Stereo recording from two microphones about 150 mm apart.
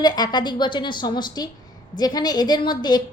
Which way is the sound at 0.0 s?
30° left (ahead or behind).